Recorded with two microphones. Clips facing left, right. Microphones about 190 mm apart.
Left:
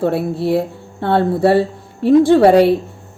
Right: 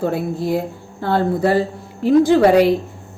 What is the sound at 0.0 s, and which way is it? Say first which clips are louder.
A woman's voice: left 3 dB; 30° left (ahead or behind).